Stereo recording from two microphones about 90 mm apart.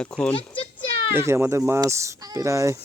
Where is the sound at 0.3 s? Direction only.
75° left (ahead or behind).